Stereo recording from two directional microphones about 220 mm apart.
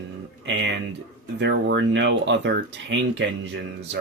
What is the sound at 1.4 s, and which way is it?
Speech, 55° right (ahead or behind).